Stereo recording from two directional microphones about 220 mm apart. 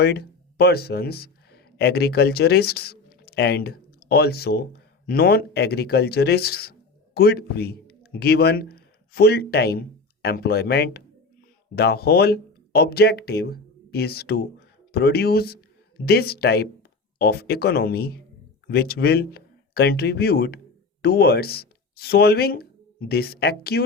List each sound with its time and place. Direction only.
0.0 s speech: 45° left (ahead or behind)